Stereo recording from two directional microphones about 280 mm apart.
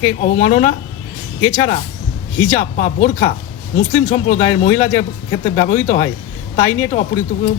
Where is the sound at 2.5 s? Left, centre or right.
Left.